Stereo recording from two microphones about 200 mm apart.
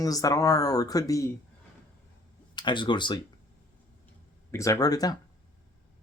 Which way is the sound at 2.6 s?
25° left (ahead or behind).